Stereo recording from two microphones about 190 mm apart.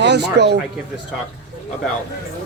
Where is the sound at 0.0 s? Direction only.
65° right (ahead or behind).